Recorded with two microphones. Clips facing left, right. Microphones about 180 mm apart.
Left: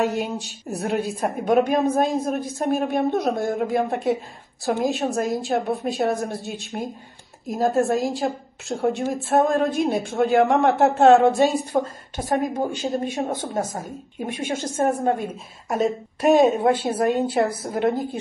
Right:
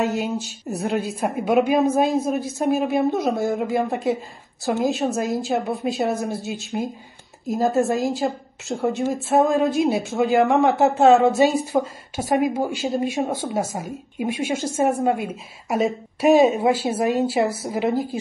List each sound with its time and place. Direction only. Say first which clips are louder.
0.0 s a woman's voice: right 1 dB; centre (ahead or behind)